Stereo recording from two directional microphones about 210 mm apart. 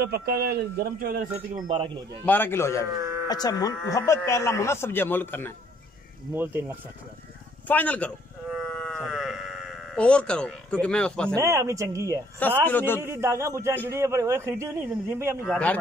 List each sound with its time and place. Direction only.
0.0 s speech: 50° right (ahead or behind)
2.2 s speech: 10° left (ahead or behind)
6.3 s a man's voice: 10° right (ahead or behind)
7.6 s livestock: 5° left (ahead or behind)
11.3 s a man's voice: 15° right (ahead or behind)
12.6 s speech: 10° left (ahead or behind)
13.0 s a man's voice: 10° right (ahead or behind)
15.4 s speech: 5° left (ahead or behind)